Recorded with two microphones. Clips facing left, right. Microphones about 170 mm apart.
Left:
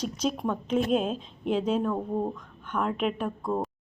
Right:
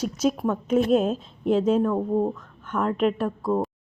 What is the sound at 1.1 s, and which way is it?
Speech, 45° right (ahead or behind).